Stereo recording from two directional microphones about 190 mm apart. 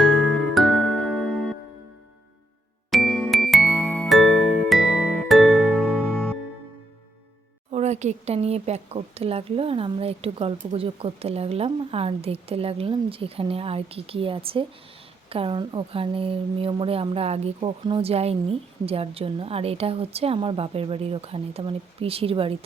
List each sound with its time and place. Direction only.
0.0 s music: centre (ahead or behind)
2.9 s music: centre (ahead or behind)
7.7 s speech: 35° right (ahead or behind)